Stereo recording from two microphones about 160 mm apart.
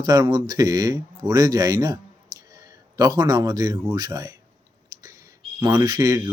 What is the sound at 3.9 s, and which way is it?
Speech, 25° right (ahead or behind).